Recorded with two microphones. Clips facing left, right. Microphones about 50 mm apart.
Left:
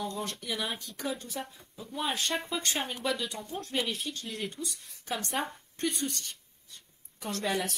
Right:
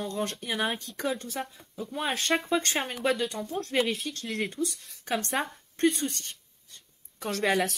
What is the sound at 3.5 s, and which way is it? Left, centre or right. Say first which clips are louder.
A woman's voice: right 5 dB; right.